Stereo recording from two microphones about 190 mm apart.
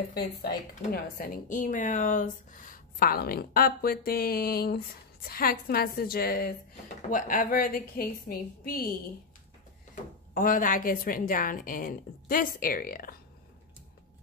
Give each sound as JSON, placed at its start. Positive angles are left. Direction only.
{"t": 0.9, "sound": "a woman's voice", "side_deg": 50}
{"t": 10.3, "sound": "a woman's voice", "side_deg": 45}